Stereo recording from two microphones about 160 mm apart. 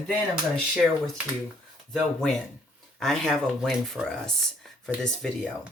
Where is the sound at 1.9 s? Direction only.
Centre (ahead or behind).